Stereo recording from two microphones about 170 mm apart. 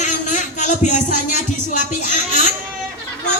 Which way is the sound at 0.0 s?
45° left (ahead or behind).